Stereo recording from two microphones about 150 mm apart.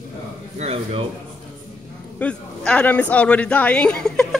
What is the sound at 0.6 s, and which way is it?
Speech, 40° right (ahead or behind).